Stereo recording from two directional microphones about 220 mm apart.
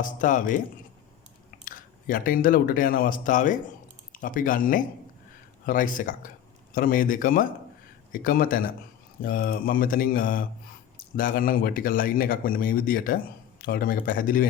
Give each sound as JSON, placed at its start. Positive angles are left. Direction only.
{"t": 0.0, "sound": "speech", "side_deg": 35}
{"t": 1.6, "sound": "speech", "side_deg": 40}